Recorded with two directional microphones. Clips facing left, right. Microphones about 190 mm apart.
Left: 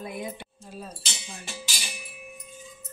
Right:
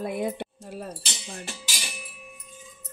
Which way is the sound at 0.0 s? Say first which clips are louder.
Right 7 dB; 65° right (ahead or behind).